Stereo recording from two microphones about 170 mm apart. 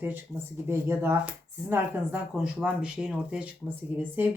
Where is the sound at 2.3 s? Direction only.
5° right (ahead or behind).